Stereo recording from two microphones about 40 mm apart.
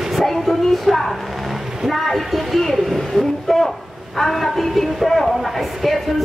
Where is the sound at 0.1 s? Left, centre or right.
Centre.